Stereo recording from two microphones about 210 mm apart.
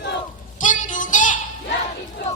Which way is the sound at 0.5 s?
35° left (ahead or behind).